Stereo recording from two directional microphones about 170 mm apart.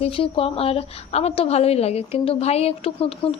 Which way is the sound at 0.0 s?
35° left (ahead or behind).